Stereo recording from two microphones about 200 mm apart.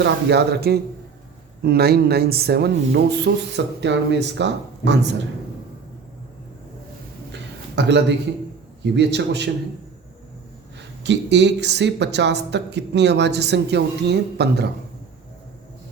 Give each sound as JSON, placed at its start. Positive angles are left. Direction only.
{"t": 0.0, "sound": "speech", "side_deg": -55}
{"t": 7.8, "sound": "speech", "side_deg": -60}
{"t": 10.8, "sound": "speech", "side_deg": -60}